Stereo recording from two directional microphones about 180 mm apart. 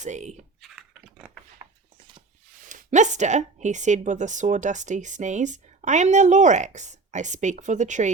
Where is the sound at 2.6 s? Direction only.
45° right (ahead or behind).